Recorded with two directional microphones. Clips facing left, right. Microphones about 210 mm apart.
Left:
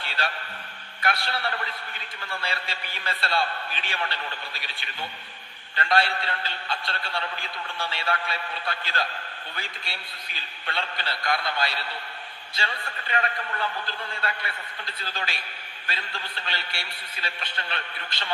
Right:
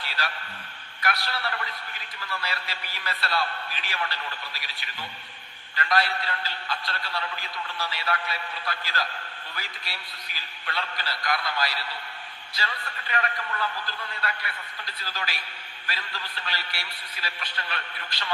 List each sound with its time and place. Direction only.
0.2 s a man's voice: 30° left (ahead or behind)